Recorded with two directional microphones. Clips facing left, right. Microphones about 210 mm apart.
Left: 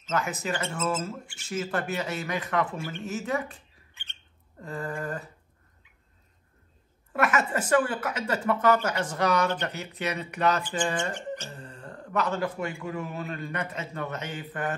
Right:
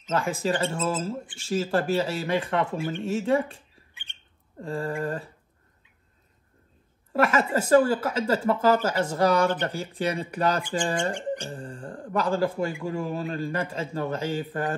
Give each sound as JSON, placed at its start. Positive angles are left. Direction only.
{"t": 0.1, "sound": "a woman's voice", "side_deg": -30}
{"t": 4.1, "sound": "bird", "side_deg": -15}
{"t": 4.6, "sound": "a woman's voice", "side_deg": -30}
{"t": 7.1, "sound": "a woman's voice", "side_deg": -30}